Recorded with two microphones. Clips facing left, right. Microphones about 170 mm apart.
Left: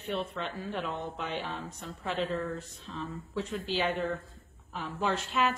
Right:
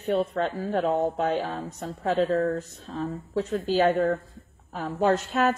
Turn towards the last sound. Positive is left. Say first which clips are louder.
# right 7 dB
turn(degrees=-40)  # may be behind; listen again after turning